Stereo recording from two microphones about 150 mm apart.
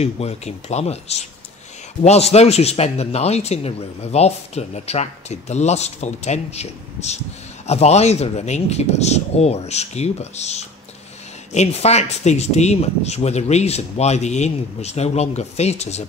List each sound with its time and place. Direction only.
0.0 s speech: 45° left (ahead or behind)